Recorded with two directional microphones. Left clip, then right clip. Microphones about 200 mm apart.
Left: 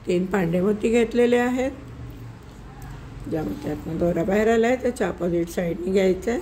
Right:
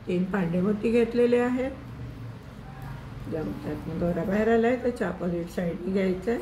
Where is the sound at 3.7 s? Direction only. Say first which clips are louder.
Left 7 dB; 55° left (ahead or behind).